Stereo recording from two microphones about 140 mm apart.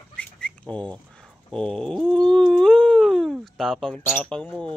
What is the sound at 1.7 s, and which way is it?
Dog, 5° left (ahead or behind).